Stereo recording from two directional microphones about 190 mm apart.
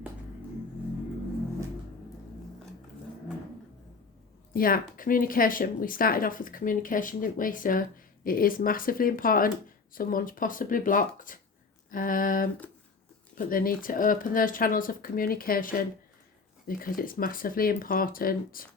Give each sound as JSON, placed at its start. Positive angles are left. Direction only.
{"t": 4.5, "sound": "speech", "side_deg": 50}